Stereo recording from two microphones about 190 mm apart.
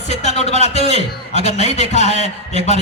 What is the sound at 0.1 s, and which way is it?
A man's voice, 35° left (ahead or behind).